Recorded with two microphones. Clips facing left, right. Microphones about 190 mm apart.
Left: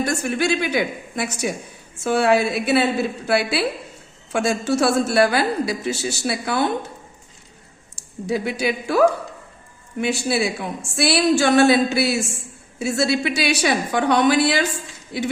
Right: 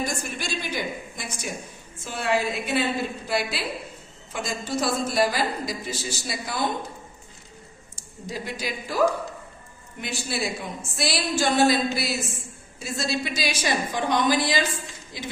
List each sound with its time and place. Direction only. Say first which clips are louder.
0.0 s a woman's voice: left 9 dB; 65° left (ahead or behind)
8.3 s a woman's voice: left 9 dB; 70° left (ahead or behind)